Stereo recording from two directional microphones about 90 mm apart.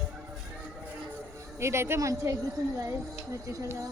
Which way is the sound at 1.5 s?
30° right (ahead or behind).